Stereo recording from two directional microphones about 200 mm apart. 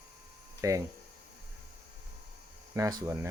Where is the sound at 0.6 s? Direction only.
15° right (ahead or behind).